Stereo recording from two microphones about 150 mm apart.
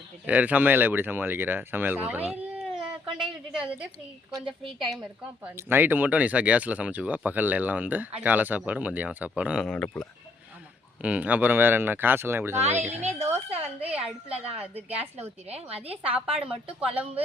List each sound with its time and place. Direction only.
0.3 s a woman's voice: 10° right (ahead or behind)
5.5 s speech: 15° right (ahead or behind)
9.6 s speech: 5° left (ahead or behind)
11.0 s speech: 10° right (ahead or behind)
12.9 s a woman's voice: 50° right (ahead or behind)